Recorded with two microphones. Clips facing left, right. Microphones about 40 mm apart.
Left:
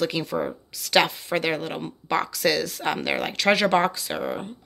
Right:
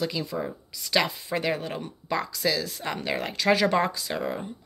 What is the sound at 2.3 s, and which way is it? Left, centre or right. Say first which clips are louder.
Speech: left 4 dB; left.